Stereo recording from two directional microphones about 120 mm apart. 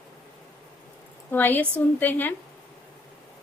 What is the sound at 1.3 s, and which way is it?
A woman's voice, 15° left (ahead or behind).